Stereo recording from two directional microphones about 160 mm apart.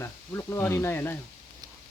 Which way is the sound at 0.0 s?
15° left (ahead or behind).